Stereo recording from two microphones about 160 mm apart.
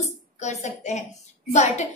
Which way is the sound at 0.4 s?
45° left (ahead or behind).